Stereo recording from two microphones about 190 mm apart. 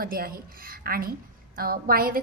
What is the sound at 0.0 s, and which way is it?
A woman's voice, 50° right (ahead or behind).